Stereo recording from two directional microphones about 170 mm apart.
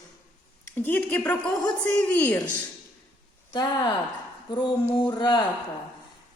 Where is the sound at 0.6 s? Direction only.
10° left (ahead or behind).